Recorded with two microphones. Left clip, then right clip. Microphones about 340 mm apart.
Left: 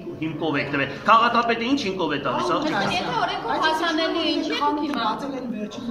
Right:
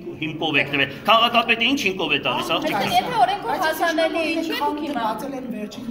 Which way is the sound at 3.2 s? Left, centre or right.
Centre.